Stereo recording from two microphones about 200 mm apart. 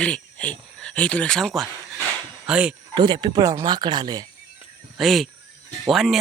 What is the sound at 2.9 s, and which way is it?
Speech, 25° right (ahead or behind).